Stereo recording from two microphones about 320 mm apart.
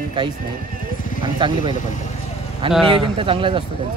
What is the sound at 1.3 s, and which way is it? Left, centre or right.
Speech, centre.